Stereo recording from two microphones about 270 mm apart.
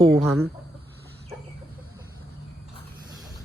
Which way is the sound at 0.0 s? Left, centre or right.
Centre.